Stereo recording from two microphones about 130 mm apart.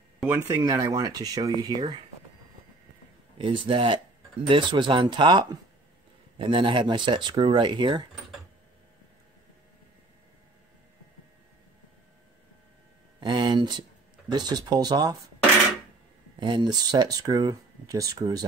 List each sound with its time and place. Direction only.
0.3 s speech: 25° right (ahead or behind)
3.3 s speech: 40° right (ahead or behind)
13.2 s a sound: 35° right (ahead or behind)
14.3 s speech: 30° right (ahead or behind)
16.3 s speech: 35° right (ahead or behind)